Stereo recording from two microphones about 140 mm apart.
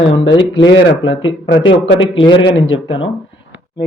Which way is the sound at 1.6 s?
35° left (ahead or behind).